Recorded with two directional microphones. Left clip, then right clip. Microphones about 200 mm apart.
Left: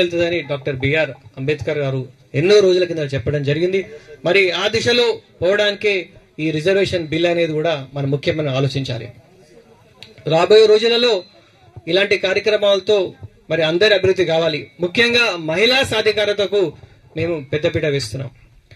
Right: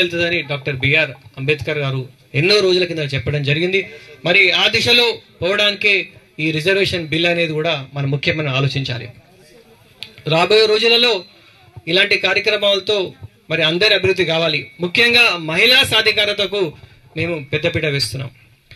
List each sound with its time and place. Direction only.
0.0 s speech: 40° left (ahead or behind)
10.2 s speech: 45° left (ahead or behind)